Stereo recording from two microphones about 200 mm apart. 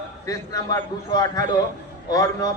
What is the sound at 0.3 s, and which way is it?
A man's voice, 15° left (ahead or behind).